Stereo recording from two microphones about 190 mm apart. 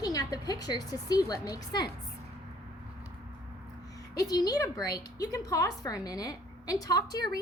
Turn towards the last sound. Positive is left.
turn(degrees=20)  # may be behind; listen again after turning